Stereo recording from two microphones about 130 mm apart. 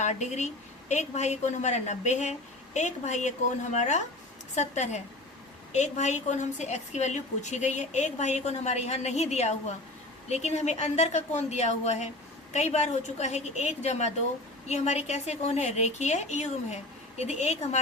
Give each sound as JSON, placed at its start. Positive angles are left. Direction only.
{"t": 0.0, "sound": "a woman's voice", "side_deg": 65}